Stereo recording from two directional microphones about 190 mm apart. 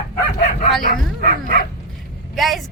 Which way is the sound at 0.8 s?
45° left (ahead or behind).